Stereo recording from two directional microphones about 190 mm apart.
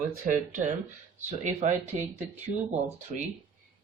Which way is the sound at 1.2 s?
35° right (ahead or behind).